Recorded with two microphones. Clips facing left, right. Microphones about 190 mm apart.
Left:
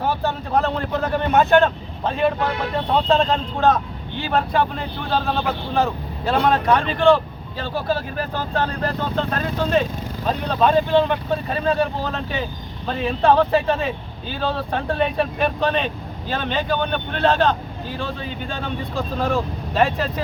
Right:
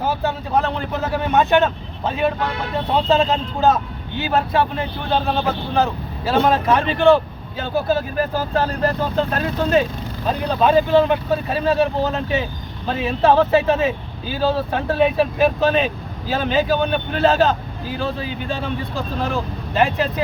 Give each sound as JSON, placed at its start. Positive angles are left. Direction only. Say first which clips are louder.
{"t": 0.0, "sound": "a man's voice", "louder": "right 1 dB", "side_deg": 0}
{"t": 9.1, "sound": "a man's voice", "louder": "right 2 dB", "side_deg": -5}